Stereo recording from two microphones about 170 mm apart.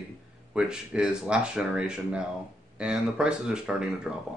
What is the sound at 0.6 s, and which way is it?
A man's voice, 5° right (ahead or behind).